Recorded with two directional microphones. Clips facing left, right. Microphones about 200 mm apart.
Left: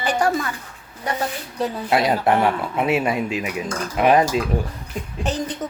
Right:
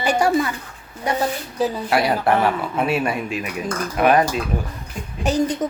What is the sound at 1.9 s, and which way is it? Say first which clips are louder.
Speech: left 2 dB; 20° left (ahead or behind).